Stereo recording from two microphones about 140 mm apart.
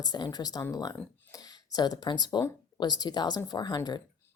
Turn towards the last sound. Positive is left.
turn(degrees=30)  # may be behind; listen again after turning